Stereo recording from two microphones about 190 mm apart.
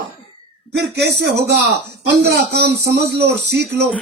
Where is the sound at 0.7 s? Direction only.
60° right (ahead or behind).